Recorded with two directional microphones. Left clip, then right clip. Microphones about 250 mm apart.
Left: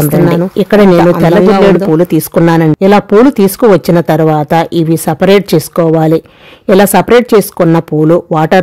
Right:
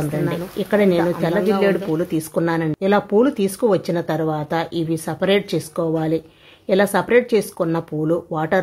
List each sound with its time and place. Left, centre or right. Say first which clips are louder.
0.0 s speech: left 14 dB; left